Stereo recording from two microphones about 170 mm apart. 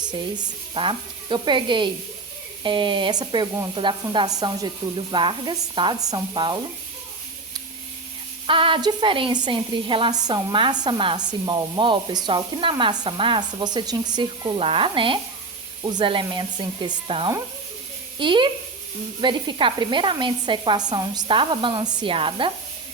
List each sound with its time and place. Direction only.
0.0 s speech: 25° right (ahead or behind)
8.4 s speech: 30° right (ahead or behind)